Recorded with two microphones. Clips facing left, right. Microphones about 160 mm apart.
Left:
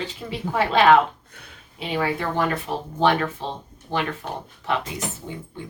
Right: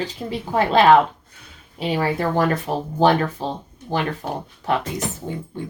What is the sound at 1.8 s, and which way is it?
A woman's voice, 35° right (ahead or behind).